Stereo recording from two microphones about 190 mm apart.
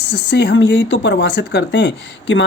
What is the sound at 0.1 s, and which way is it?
Speech, 60° left (ahead or behind).